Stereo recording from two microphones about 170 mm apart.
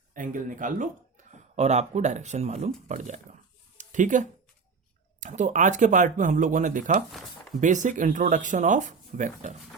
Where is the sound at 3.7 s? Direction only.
45° right (ahead or behind).